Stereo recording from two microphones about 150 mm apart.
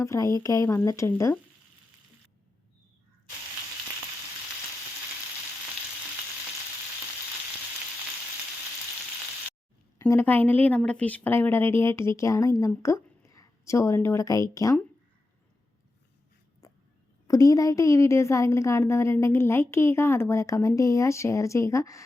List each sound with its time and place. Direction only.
0.0 s a woman's voice: 20° left (ahead or behind)
10.0 s a woman's voice: 15° left (ahead or behind)
16.6 s a sound: 20° left (ahead or behind)
17.2 s a woman's voice: 25° left (ahead or behind)